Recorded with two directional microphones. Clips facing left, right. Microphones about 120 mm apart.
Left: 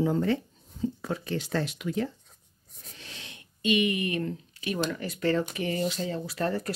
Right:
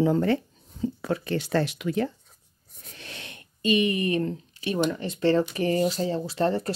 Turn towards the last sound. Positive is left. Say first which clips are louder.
# right 5 dB
turn(degrees=-30)  # may be behind; listen again after turning